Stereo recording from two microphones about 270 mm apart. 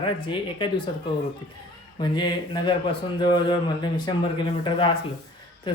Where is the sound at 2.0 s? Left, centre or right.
Centre.